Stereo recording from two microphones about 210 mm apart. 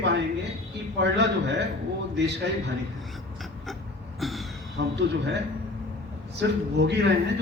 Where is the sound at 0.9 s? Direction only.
55° right (ahead or behind).